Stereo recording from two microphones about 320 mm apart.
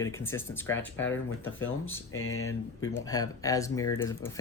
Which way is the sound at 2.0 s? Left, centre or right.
Left.